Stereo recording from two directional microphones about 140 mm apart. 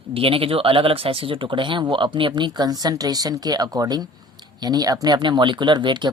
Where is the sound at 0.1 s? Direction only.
40° right (ahead or behind).